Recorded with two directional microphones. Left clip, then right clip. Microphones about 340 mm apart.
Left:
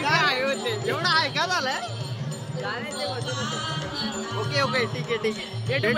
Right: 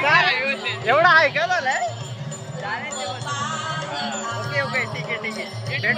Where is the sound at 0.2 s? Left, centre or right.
Centre.